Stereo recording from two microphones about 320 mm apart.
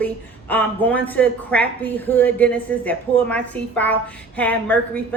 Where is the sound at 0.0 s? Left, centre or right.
Centre.